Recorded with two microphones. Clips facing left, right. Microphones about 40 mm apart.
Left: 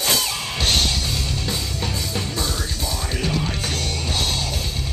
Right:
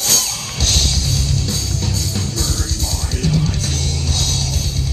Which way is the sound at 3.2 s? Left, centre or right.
Centre.